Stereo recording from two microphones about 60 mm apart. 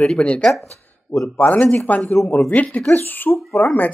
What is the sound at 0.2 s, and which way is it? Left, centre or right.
Speech, centre.